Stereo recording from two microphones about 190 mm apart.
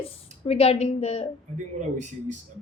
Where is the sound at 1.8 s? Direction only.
40° right (ahead or behind).